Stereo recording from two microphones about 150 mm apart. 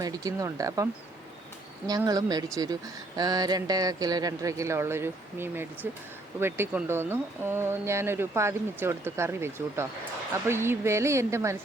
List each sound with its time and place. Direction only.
0.0 s speech: 25° right (ahead or behind)
2.0 s speech: 25° right (ahead or behind)